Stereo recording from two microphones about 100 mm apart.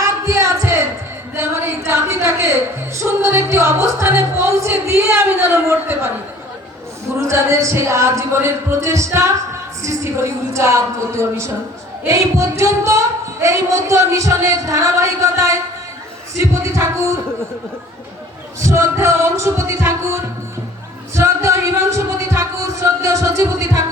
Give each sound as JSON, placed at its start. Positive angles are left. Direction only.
{"t": 0.0, "sound": "a sound", "side_deg": -30}
{"t": 3.0, "sound": "music", "side_deg": -30}
{"t": 7.2, "sound": "music", "side_deg": -30}
{"t": 13.4, "sound": "speech", "side_deg": -30}
{"t": 16.4, "sound": "music", "side_deg": -30}
{"t": 18.6, "sound": "music", "side_deg": -30}
{"t": 21.2, "sound": "music", "side_deg": -30}